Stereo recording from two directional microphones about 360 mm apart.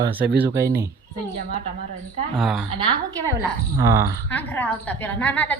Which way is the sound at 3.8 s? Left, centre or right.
Centre.